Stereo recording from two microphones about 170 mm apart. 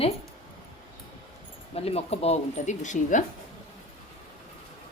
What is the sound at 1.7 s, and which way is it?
Speech, 35° left (ahead or behind).